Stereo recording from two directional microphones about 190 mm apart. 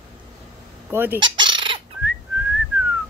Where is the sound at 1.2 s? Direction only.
25° right (ahead or behind).